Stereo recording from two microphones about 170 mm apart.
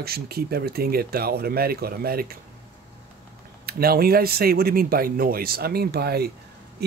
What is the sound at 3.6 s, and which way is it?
Speech, 65° right (ahead or behind).